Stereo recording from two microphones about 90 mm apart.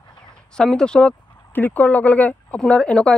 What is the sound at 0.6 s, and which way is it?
Speech, 10° left (ahead or behind).